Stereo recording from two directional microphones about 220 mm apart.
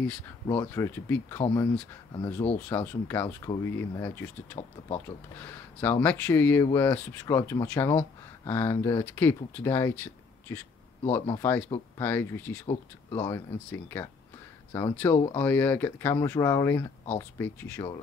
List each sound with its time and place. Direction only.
0.6 s speech: 10° left (ahead or behind)
4.6 s speech: 30° left (ahead or behind)
5.0 s speech: 10° left (ahead or behind)